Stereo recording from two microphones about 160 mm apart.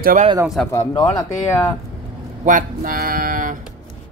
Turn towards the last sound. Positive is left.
turn(degrees=-60)  # may be behind; listen again after turning